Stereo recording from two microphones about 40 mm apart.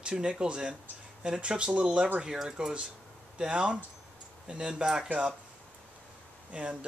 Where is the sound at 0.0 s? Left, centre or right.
Right.